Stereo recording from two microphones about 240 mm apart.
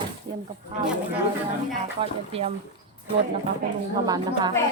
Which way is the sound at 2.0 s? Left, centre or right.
Right.